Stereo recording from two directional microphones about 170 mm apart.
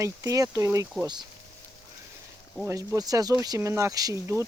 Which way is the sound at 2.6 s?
15° right (ahead or behind).